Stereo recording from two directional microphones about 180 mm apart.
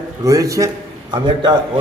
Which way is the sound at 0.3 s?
20° right (ahead or behind).